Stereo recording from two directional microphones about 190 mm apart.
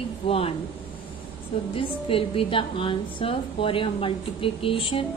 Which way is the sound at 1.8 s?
30° left (ahead or behind).